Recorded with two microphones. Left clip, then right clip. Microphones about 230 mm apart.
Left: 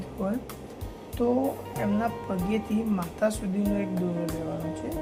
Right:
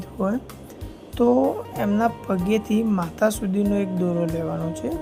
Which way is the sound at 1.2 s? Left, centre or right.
Right.